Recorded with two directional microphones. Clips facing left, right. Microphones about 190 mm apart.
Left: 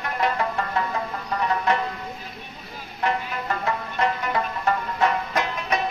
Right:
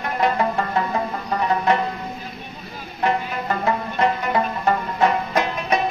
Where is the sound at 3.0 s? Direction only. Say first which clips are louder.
Right 4 dB; 25° right (ahead or behind).